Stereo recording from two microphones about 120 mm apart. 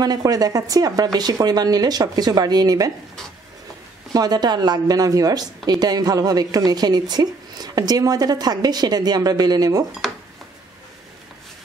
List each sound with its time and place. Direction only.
0.0 s a woman's voice: 30° right (ahead or behind)
4.1 s a woman's voice: 35° right (ahead or behind)